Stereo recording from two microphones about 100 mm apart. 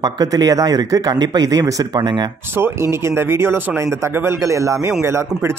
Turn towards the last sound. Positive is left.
turn(degrees=-25)  # may be behind; listen again after turning